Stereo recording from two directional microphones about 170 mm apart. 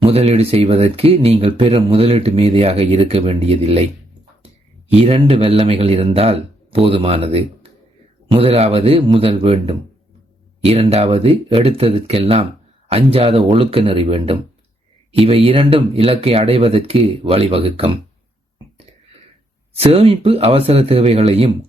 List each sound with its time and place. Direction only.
0.0 s speech: 35° right (ahead or behind)
4.9 s speech: 35° right (ahead or behind)
19.8 s speech: 35° right (ahead or behind)